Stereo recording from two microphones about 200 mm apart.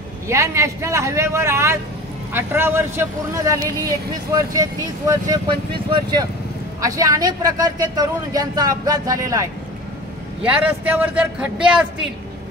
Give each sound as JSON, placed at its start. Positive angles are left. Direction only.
{"t": 0.3, "sound": "speech", "side_deg": -15}
{"t": 10.5, "sound": "speech", "side_deg": -10}